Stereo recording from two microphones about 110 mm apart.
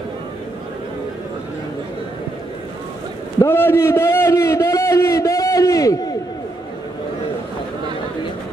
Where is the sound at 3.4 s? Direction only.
20° left (ahead or behind).